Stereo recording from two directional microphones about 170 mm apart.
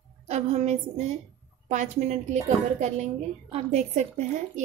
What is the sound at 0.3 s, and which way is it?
A woman's voice, 40° right (ahead or behind).